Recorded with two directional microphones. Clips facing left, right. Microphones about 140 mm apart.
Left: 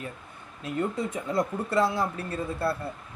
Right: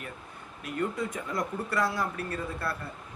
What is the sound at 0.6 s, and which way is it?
Speech, 25° left (ahead or behind).